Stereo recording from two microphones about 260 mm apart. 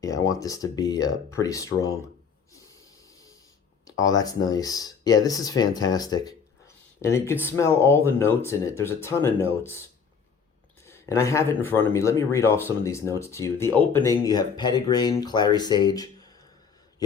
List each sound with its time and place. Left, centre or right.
0.0 s speech: centre
3.8 s speech: centre
10.8 s speech: centre